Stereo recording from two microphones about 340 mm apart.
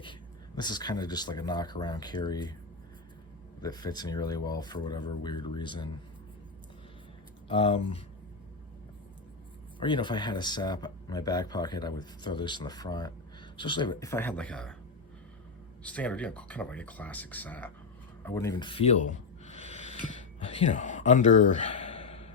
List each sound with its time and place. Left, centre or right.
0.0 s speech: centre
3.6 s speech: centre
7.4 s speech: centre
9.8 s speech: centre
15.8 s a man's voice: centre; by 19.5 s left
19.6 s a sound: left
20.7 s speech: left